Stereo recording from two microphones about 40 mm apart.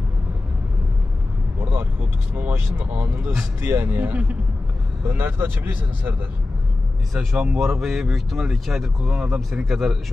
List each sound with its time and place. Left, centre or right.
1.7 s vehicle: right
2.8 s speech: right
3.3 s speech: right
4.0 s speech: right
5.0 s speech: right
7.2 s speech: centre